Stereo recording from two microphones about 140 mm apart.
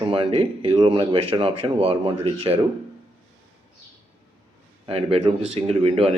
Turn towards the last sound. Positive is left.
turn(degrees=-45)  # may be behind; listen again after turning